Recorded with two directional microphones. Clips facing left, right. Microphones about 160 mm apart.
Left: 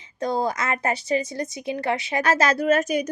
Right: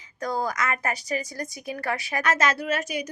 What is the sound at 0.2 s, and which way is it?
Speech, 25° left (ahead or behind).